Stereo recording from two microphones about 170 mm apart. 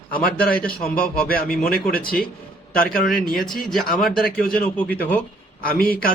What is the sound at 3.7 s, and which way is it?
Speech, centre (ahead or behind).